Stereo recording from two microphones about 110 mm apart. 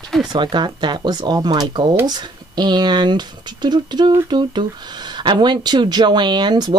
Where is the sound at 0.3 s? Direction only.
45° right (ahead or behind).